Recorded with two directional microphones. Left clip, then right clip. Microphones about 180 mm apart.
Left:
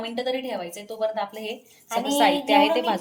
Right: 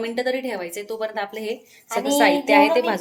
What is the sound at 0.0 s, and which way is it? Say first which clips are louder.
A child's voice: right 4 dB; 30° right (ahead or behind).